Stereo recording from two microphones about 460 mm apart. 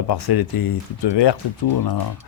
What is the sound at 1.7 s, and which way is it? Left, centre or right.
Speech, left.